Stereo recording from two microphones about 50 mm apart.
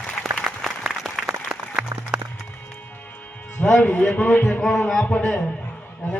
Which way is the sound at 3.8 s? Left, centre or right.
Left.